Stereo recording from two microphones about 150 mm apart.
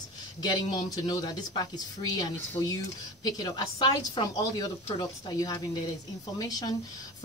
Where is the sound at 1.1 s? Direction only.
30° left (ahead or behind).